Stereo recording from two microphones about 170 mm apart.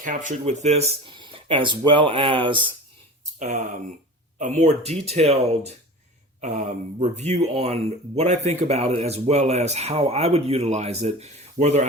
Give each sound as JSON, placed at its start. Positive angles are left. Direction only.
{"t": 0.0, "sound": "speech", "side_deg": -50}
{"t": 3.3, "sound": "speech", "side_deg": -45}